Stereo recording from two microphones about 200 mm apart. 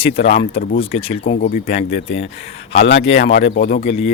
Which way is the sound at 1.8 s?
60° left (ahead or behind).